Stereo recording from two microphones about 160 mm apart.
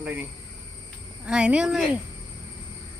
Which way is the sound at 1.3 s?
5° right (ahead or behind).